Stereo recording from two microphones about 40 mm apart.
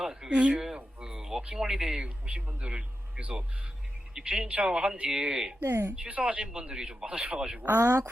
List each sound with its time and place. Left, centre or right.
0.0 s a sound: centre
0.3 s a woman's voice: right
0.5 s speech: centre
2.0 s a woman's voice: right
5.6 s speech: right
6.1 s a woman's voice: right
6.5 s speech: right
7.1 s a woman's voice: right
7.3 s speech: centre